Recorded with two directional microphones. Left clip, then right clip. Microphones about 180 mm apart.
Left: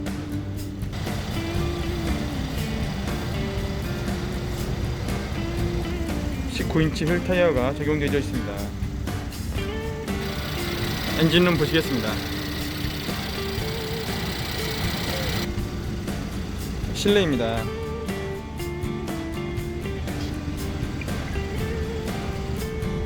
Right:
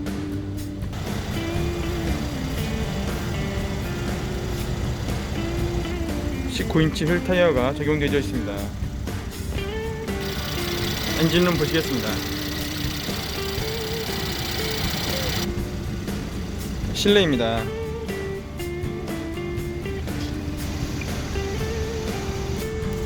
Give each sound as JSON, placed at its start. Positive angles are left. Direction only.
{"t": 6.6, "sound": "speech", "side_deg": -5}
{"t": 11.2, "sound": "speech", "side_deg": 20}
{"t": 17.0, "sound": "speech", "side_deg": -5}